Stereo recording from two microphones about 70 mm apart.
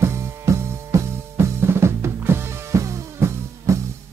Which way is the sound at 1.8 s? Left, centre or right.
Right.